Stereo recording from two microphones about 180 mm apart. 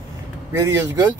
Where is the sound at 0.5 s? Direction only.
15° right (ahead or behind).